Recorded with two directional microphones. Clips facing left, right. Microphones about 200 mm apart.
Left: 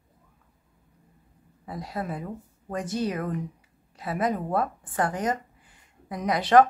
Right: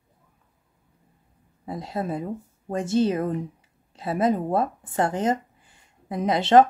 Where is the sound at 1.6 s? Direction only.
25° right (ahead or behind).